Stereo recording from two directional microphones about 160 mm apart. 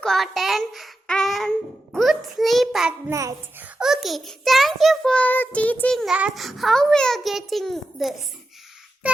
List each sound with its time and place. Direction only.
0.0 s a child's voice: centre (ahead or behind)
3.1 s a child's voice: 20° right (ahead or behind)
3.8 s a child's voice: centre (ahead or behind)
9.0 s child singing: 10° right (ahead or behind)